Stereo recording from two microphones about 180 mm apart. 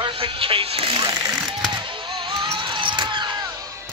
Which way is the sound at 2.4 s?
25° right (ahead or behind).